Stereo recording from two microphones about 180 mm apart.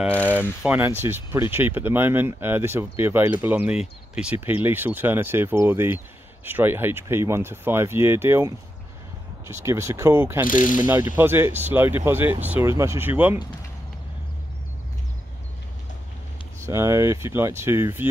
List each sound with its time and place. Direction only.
0.6 s speech: 10° right (ahead or behind)
10.4 s speech: 50° left (ahead or behind)
10.8 s speech: 15° right (ahead or behind)
16.6 s speech: 15° right (ahead or behind)